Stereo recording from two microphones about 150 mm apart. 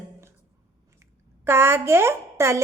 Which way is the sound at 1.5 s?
15° right (ahead or behind).